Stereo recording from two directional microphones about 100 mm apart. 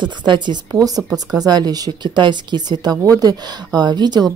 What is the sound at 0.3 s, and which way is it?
Speech, 45° right (ahead or behind).